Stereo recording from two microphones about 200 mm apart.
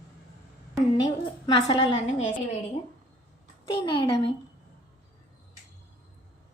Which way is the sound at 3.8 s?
25° left (ahead or behind).